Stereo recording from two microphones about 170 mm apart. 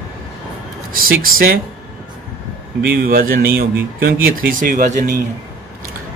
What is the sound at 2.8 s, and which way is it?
A man's voice, 60° right (ahead or behind).